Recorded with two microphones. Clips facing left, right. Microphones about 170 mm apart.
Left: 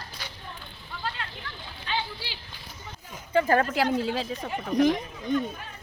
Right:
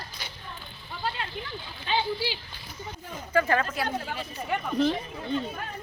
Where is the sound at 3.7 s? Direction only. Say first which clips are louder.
Left 6 dB; 90° left.